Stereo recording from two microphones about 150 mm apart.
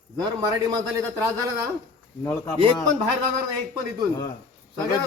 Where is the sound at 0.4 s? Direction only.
25° right (ahead or behind).